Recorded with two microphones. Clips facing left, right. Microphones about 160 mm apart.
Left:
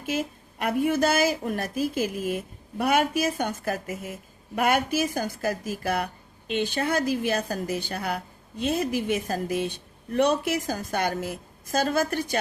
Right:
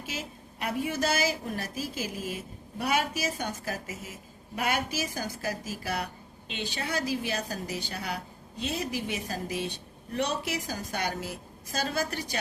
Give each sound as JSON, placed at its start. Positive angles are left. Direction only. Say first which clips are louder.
{"t": 0.0, "sound": "a woman's voice", "louder": "left 9 dB", "side_deg": 55}